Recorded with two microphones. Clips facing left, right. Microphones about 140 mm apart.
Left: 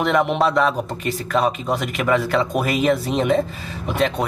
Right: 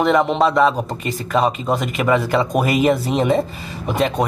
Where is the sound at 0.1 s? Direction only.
Centre (ahead or behind).